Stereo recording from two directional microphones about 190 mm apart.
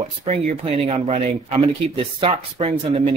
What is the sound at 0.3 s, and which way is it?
Speech, 30° right (ahead or behind).